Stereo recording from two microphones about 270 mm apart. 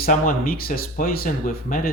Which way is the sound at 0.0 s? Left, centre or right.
Left.